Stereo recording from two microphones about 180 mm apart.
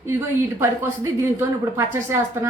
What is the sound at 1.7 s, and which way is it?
Speech, 15° right (ahead or behind).